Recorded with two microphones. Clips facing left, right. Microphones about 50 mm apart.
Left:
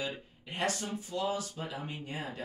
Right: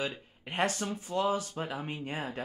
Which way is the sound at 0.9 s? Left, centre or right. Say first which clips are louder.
Right 4 dB; right.